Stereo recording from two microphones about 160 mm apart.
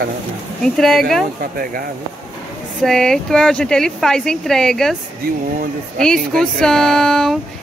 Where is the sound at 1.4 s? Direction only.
65° right (ahead or behind).